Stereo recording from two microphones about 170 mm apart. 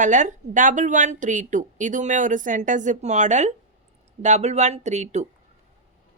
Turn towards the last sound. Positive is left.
turn(degrees=-45)  # may be behind; listen again after turning